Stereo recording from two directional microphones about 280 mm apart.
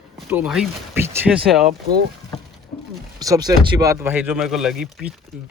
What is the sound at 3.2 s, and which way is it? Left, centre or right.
Speech, centre.